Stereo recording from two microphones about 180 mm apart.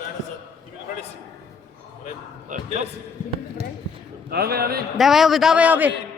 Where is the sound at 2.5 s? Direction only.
45° right (ahead or behind).